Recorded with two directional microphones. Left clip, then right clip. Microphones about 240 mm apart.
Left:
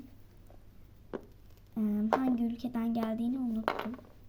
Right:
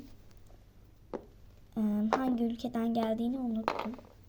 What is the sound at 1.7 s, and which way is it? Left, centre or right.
Speech, centre.